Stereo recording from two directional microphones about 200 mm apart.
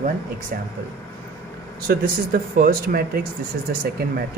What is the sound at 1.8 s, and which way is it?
Speech, 45° right (ahead or behind).